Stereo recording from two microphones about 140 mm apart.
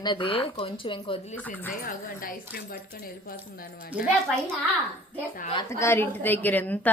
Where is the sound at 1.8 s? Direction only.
90° left.